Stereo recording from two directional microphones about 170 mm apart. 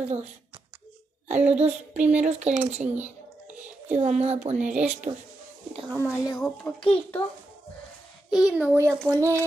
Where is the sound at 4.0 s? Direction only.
40° right (ahead or behind).